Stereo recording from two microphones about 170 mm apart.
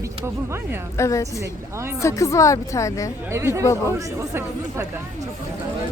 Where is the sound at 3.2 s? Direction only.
15° right (ahead or behind).